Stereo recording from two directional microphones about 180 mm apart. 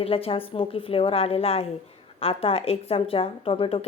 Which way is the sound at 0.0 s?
30° left (ahead or behind).